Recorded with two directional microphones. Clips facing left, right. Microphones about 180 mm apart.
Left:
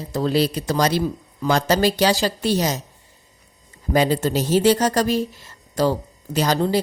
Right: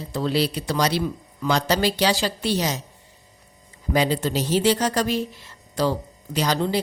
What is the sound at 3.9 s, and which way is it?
A woman's voice, 45° left (ahead or behind).